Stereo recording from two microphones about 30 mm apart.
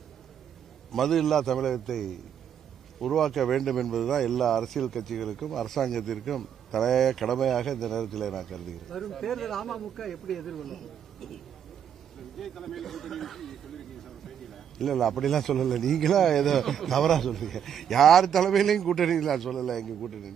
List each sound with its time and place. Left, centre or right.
0.9 s speech: centre
12.4 s speech: centre